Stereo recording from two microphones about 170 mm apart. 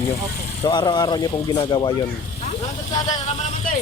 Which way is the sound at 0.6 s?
25° left (ahead or behind).